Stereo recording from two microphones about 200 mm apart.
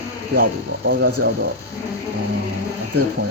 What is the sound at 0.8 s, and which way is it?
Speech, 55° right (ahead or behind).